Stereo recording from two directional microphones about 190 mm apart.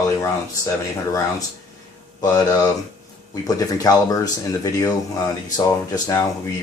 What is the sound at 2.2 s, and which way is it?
Speech, 20° left (ahead or behind).